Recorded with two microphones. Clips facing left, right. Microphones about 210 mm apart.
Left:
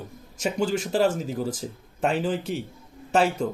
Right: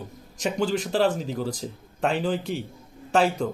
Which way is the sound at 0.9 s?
40° left (ahead or behind).